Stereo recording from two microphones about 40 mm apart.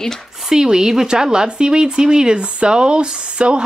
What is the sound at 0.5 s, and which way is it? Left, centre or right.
Speech, centre.